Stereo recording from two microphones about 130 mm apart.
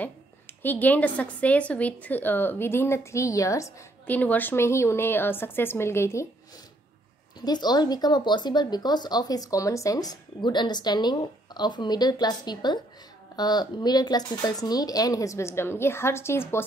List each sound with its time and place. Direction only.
0.6 s speech: 15° left (ahead or behind)
4.1 s speech: 15° left (ahead or behind)
7.4 s speech: 30° left (ahead or behind)